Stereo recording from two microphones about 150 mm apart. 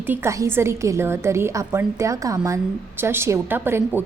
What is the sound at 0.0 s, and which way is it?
A woman's voice, 15° right (ahead or behind).